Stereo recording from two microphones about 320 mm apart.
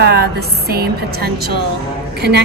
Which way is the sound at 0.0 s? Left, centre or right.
Right.